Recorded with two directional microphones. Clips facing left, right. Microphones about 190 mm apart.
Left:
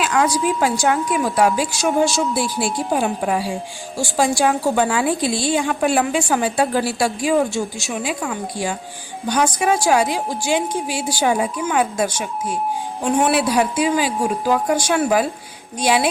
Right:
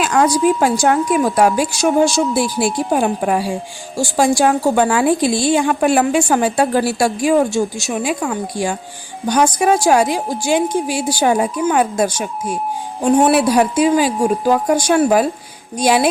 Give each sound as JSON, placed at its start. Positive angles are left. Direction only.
{"t": 0.0, "sound": "a woman's voice", "side_deg": -45}